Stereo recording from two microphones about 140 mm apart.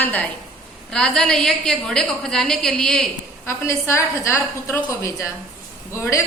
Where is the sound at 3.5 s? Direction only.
20° left (ahead or behind).